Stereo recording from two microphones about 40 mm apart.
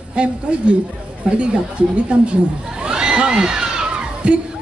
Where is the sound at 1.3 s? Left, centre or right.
Centre.